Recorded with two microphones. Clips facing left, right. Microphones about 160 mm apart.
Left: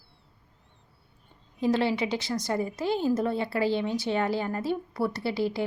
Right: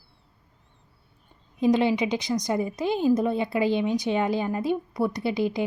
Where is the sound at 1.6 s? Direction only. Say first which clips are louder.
Right 4 dB; 15° right (ahead or behind).